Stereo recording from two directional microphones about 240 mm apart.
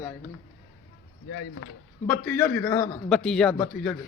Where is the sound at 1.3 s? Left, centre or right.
Left.